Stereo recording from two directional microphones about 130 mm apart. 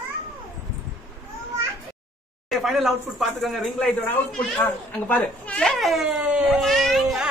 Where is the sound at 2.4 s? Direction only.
Centre (ahead or behind).